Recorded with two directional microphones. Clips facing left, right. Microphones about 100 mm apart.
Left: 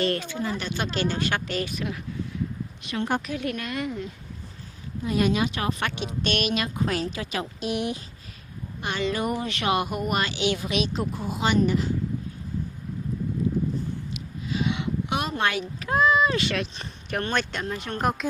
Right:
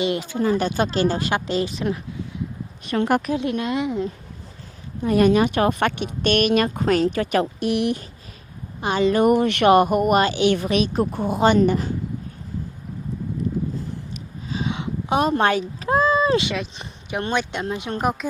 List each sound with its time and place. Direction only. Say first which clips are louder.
0.0 s speech: right 3 dB; 15° right (ahead or behind)
0.6 s a woman's voice: right 7 dB; 30° right (ahead or behind)
3.0 s a woman's voice: right 6 dB; 75° right (ahead or behind)
3.3 s a woman's voice: right 7 dB; 25° right (ahead or behind)
5.0 s speech: right 7 dB; 55° right (ahead or behind)
8.8 s speech: right 8 dB; 40° right (ahead or behind)
9.2 s speech: right 11 dB; 65° right (ahead or behind); by 11.9 s 50° right (ahead or behind)
14.5 s a sound: even; 30° right (ahead or behind)
16.7 s speech: right 2 dB; 20° right (ahead or behind)